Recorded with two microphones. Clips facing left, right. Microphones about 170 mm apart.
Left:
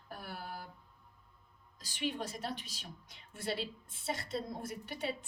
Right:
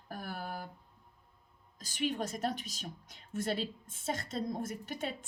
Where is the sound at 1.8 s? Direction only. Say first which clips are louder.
Right 3 dB; 45° right (ahead or behind).